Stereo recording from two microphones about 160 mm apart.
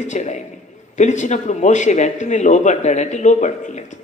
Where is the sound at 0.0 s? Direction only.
50° left (ahead or behind).